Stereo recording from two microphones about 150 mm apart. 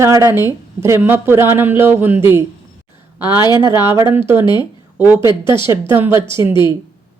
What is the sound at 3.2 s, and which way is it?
Speech, 25° left (ahead or behind).